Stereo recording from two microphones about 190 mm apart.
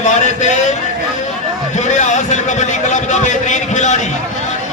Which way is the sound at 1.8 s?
40° left (ahead or behind).